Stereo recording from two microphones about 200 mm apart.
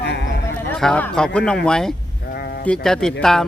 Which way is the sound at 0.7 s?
5° left (ahead or behind).